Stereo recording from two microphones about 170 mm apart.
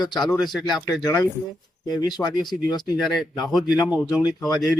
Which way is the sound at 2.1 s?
25° left (ahead or behind).